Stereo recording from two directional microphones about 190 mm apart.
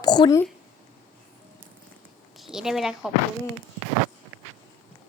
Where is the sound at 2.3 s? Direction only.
Centre (ahead or behind).